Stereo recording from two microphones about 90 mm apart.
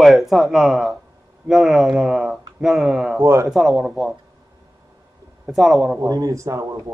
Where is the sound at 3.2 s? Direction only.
30° right (ahead or behind).